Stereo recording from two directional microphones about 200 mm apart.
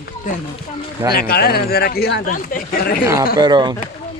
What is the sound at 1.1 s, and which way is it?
A man's voice, 50° left (ahead or behind).